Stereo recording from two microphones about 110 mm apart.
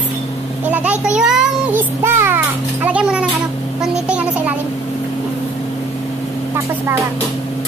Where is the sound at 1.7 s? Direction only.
20° right (ahead or behind).